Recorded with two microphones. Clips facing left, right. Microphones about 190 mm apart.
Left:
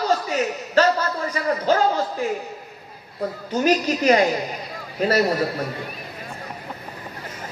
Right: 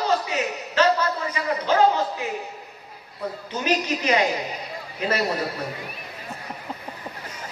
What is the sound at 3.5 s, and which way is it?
Speech, 40° left (ahead or behind).